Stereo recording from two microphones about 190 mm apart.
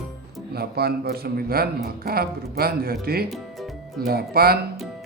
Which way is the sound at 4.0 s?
50° right (ahead or behind).